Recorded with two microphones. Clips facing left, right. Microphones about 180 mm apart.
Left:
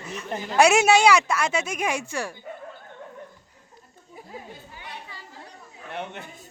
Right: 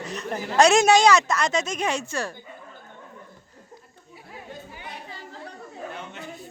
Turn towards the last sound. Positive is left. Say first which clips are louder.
# left 3 dB
turn(degrees=65)  # may be behind; listen again after turning